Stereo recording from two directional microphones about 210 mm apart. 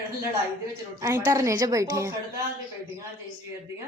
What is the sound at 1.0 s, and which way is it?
A woman's voice, 15° right (ahead or behind).